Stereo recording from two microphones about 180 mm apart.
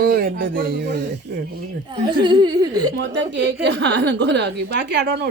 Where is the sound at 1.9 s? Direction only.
25° right (ahead or behind).